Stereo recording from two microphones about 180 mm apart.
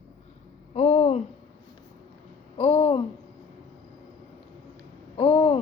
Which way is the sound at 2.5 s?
30° left (ahead or behind).